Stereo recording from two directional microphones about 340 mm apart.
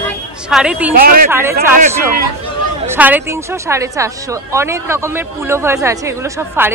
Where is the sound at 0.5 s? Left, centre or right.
Centre.